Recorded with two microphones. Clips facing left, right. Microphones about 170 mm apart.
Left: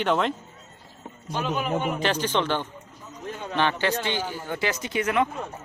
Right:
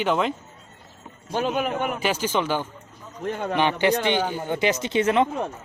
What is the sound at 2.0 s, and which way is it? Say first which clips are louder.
Speech: right 1 dB; 10° right (ahead or behind).